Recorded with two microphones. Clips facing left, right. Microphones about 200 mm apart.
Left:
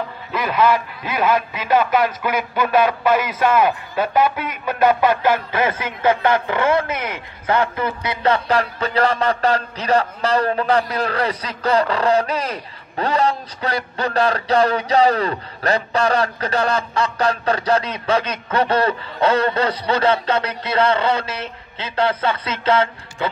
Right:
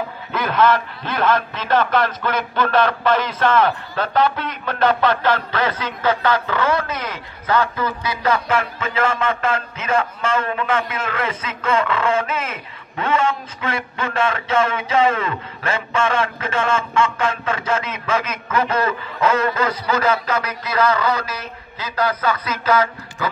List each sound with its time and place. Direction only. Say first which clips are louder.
0.3 s a man's voice: even; 5° left (ahead or behind); by 23.3 s 30° left (ahead or behind)